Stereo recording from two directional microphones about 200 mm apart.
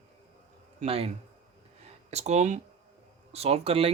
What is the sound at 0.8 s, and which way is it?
Speech, 30° right (ahead or behind).